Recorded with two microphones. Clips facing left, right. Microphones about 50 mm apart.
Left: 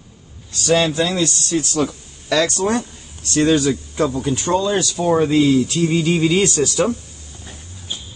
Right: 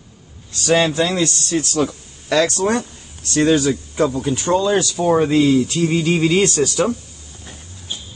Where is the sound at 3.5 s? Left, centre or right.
Centre.